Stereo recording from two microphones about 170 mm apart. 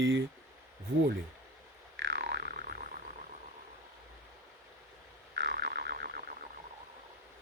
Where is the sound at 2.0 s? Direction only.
85° right; by 2.7 s 65° right (ahead or behind).